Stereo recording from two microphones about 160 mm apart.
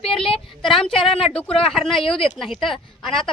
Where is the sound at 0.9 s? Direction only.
35° left (ahead or behind).